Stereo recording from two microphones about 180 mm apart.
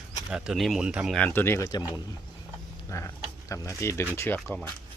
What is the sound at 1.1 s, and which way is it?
Speech, 10° left (ahead or behind).